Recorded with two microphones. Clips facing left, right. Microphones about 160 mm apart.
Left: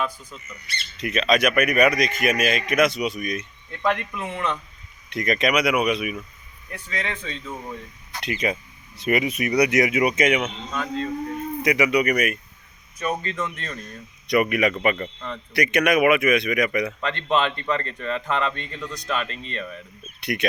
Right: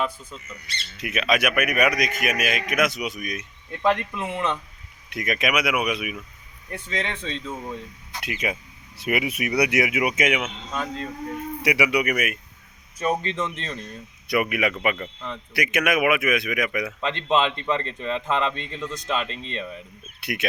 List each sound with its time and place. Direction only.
0.9 s a man's voice: 5° right (ahead or behind)
3.8 s a man's voice: 25° right (ahead or behind)
5.0 s a man's voice: 5° right (ahead or behind)
6.7 s a man's voice: 25° right (ahead or behind)
8.2 s a man's voice: 10° right (ahead or behind)
13.0 s a man's voice: 25° right (ahead or behind)
14.5 s a man's voice: 5° right (ahead or behind)
17.0 s a man's voice: 20° right (ahead or behind)
20.2 s a man's voice: 5° right (ahead or behind)